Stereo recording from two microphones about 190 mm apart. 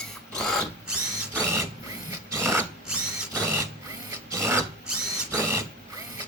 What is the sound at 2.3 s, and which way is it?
Sewing machine, 15° right (ahead or behind).